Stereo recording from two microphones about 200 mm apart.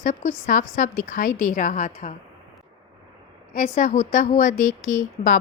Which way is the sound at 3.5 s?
40° left (ahead or behind).